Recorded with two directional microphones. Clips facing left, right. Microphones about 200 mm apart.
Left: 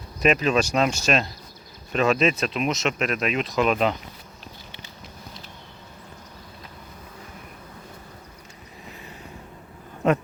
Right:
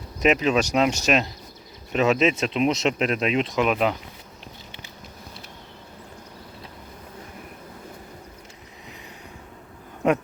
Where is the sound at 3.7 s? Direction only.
10° right (ahead or behind).